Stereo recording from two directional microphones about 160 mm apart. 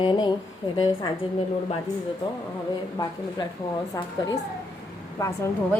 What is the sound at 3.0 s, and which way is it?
Speech, 25° left (ahead or behind).